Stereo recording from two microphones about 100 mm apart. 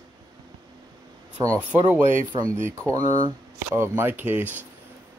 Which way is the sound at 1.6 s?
20° right (ahead or behind).